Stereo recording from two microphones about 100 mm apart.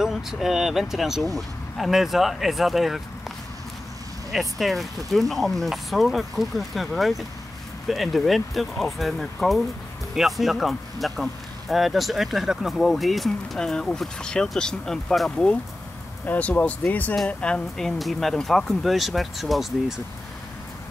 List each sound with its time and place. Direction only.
0.0 s speech: 5° right (ahead or behind)
4.3 s speech: centre (ahead or behind)
16.3 s speech: 15° left (ahead or behind); by 20.0 s centre (ahead or behind)